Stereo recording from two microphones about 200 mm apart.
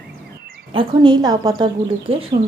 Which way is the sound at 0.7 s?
20° right (ahead or behind).